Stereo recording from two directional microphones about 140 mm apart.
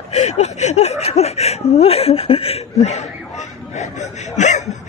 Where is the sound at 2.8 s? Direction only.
55° left (ahead or behind).